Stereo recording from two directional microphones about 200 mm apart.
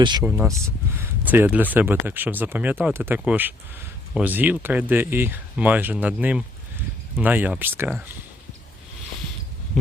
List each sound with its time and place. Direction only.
0.0 s speech: 20° right (ahead or behind)
0.3 s speech: 5° right (ahead or behind)